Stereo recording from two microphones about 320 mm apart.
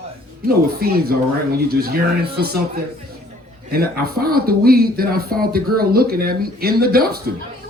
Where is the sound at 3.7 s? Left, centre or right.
Right.